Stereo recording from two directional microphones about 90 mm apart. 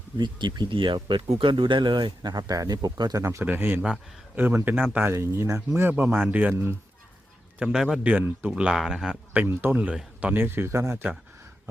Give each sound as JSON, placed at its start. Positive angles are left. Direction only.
{"t": 0.2, "sound": "speech", "side_deg": -55}
{"t": 2.3, "sound": "speech", "side_deg": -45}
{"t": 3.4, "sound": "speech", "side_deg": -20}
{"t": 8.1, "sound": "speech", "side_deg": -20}
{"t": 9.5, "sound": "speech", "side_deg": -20}